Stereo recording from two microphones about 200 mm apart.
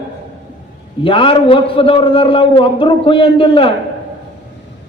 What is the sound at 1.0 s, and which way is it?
A man's voice, 25° left (ahead or behind).